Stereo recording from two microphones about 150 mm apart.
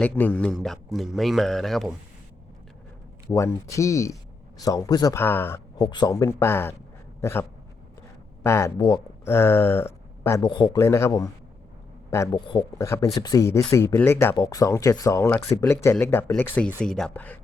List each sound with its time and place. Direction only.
0.0 s a man's voice: 10° left (ahead or behind)
3.2 s speech: 20° left (ahead or behind)
5.1 s speech: 15° left (ahead or behind)
5.7 s speech: 25° left (ahead or behind)
7.2 s a sound: 20° left (ahead or behind)
8.4 s speech: 20° left (ahead or behind)
10.4 s a man's voice: 30° left (ahead or behind)
10.8 s speech: 20° left (ahead or behind)
12.1 s speech: 20° left (ahead or behind)